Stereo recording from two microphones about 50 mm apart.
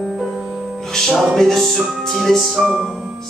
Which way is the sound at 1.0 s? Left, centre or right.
Centre.